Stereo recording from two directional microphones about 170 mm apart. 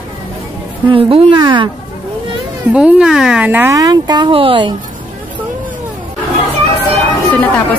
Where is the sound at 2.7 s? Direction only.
5° right (ahead or behind); by 4.8 s 30° right (ahead or behind).